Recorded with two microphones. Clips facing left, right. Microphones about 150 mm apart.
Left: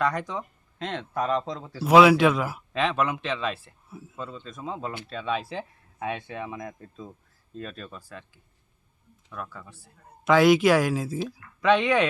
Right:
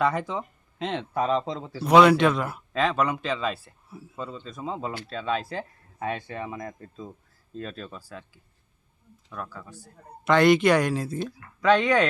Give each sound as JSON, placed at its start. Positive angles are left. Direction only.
{"t": 0.0, "sound": "speech", "side_deg": -5}
{"t": 9.3, "sound": "speech", "side_deg": 0}